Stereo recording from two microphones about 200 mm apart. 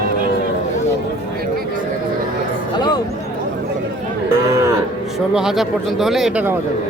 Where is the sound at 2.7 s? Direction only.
20° left (ahead or behind).